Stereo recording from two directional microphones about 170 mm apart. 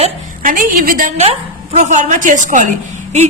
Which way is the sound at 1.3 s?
35° right (ahead or behind).